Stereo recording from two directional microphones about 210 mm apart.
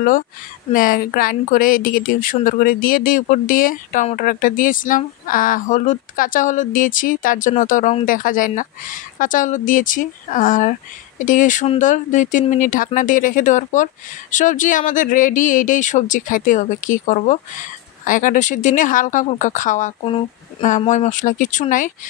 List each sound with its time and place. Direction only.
0.7 s speech: 40° left (ahead or behind)